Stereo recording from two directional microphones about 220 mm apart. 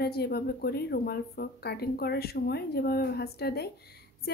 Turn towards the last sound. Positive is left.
turn(degrees=45)  # may be behind; listen again after turning